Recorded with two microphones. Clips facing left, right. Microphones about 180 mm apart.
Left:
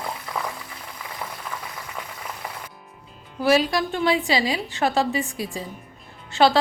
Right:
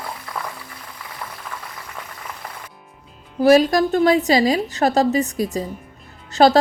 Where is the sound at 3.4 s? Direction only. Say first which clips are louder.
Right 6 dB; 45° right (ahead or behind).